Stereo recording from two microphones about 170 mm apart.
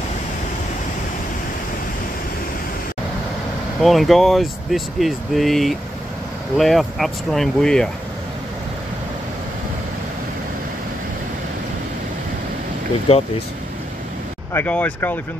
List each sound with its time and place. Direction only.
3.8 s speech: centre (ahead or behind)
13.1 s speech: 35° left (ahead or behind)
14.5 s speech: 10° left (ahead or behind)